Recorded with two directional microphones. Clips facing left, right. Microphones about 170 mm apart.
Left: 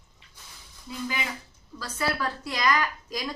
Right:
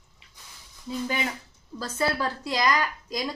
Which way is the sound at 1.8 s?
25° right (ahead or behind).